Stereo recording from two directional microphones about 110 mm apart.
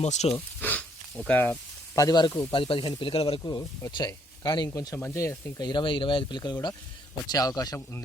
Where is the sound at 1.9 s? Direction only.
35° left (ahead or behind).